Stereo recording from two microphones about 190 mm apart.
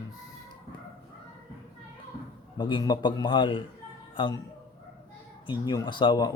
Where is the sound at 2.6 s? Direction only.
25° left (ahead or behind).